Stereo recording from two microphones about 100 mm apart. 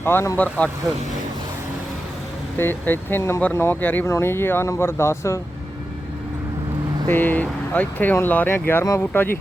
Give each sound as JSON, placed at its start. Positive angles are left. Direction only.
{"t": 0.0, "sound": "speech", "side_deg": 25}
{"t": 2.6, "sound": "speech", "side_deg": 20}
{"t": 7.1, "sound": "speech", "side_deg": 20}